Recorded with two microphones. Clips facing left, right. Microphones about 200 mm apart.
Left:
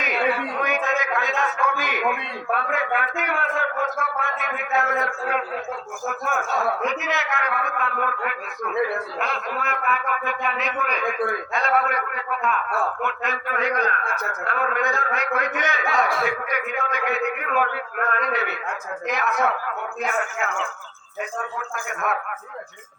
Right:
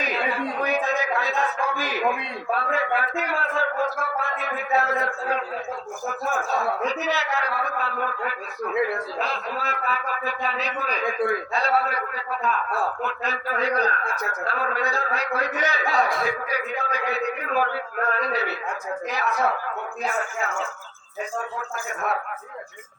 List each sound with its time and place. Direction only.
0.6 s a man's voice: 35° right (ahead or behind)